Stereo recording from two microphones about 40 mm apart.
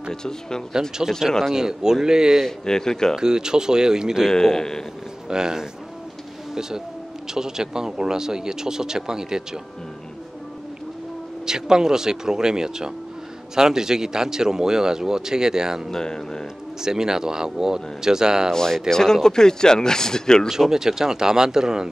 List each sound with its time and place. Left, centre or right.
0.1 s speech: centre
1.5 s speech: centre
2.4 s speech: centre
3.2 s speech: centre
4.3 s speech: centre
5.3 s speech: centre
7.2 s speech: centre
11.4 s speech: centre
15.9 s speech: centre
16.8 s speech: centre
18.5 s speech: centre
20.7 s speech: centre